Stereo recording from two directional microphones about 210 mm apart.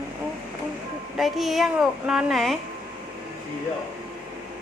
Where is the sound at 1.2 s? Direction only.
Centre (ahead or behind).